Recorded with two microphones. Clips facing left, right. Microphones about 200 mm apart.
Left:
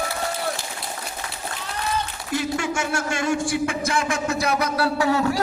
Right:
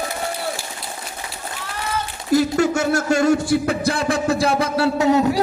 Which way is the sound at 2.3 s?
40° right (ahead or behind).